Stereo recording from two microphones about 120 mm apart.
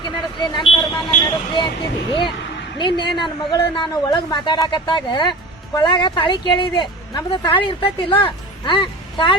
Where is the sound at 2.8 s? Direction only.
40° left (ahead or behind).